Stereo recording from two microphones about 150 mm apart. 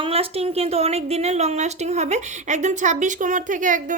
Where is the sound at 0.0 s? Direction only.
40° right (ahead or behind).